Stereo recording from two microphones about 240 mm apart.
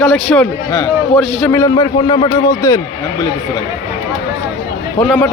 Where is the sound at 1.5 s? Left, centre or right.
Centre.